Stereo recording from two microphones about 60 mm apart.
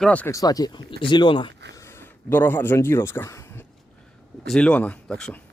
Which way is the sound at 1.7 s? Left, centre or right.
Left.